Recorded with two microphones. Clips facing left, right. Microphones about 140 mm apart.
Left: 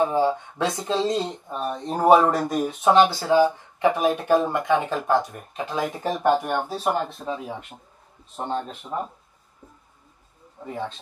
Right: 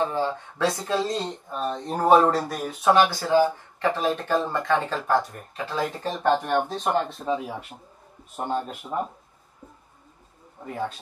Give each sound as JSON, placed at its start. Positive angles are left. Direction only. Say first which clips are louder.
{"t": 0.0, "sound": "speech", "louder": "left 4 dB", "side_deg": 10}
{"t": 1.5, "sound": "speech", "louder": "right 1 dB", "side_deg": 5}
{"t": 8.4, "sound": "speech", "louder": "even", "side_deg": -5}